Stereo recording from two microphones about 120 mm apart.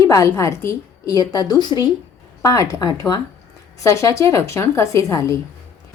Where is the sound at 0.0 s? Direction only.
25° left (ahead or behind).